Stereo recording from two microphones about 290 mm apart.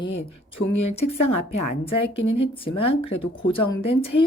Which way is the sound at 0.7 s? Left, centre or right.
Left.